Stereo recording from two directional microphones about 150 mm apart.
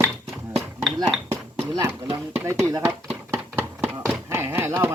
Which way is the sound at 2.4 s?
20° right (ahead or behind).